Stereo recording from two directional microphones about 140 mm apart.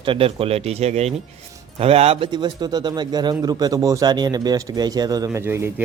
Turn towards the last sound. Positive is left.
turn(degrees=-15)  # may be behind; listen again after turning